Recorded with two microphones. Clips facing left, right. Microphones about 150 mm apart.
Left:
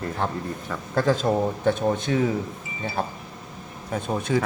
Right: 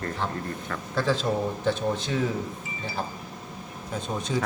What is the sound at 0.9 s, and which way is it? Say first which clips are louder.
Speech: left 4 dB; 50° left (ahead or behind).